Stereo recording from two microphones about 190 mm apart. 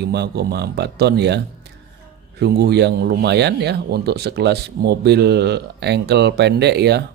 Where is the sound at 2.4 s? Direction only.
60° right (ahead or behind).